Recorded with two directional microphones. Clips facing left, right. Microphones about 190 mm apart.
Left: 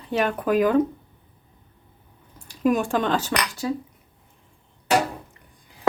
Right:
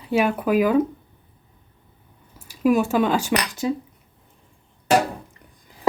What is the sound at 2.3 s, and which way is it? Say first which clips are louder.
Speech: right 3 dB; 5° right (ahead or behind).